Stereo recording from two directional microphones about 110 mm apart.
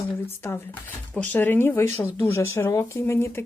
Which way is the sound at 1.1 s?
15° left (ahead or behind).